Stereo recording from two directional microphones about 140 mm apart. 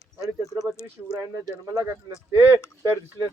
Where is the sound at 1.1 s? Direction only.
25° right (ahead or behind).